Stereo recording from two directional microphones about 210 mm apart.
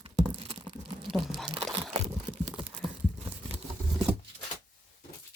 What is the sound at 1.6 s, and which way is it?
Crumpling, centre (ahead or behind).